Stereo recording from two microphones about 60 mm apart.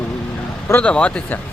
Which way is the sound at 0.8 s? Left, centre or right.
Centre.